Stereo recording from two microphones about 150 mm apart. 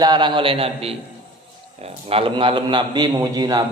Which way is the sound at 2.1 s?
35° right (ahead or behind).